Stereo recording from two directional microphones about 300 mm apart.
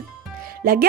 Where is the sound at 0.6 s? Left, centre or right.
Right.